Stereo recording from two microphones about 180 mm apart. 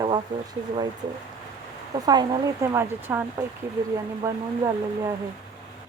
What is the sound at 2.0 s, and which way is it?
Speech, 20° right (ahead or behind).